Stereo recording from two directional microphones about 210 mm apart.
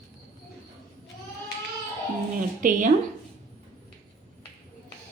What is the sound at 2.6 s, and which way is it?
Speech, 40° right (ahead or behind).